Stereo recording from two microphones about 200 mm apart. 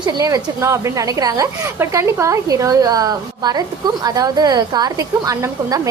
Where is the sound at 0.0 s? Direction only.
20° right (ahead or behind).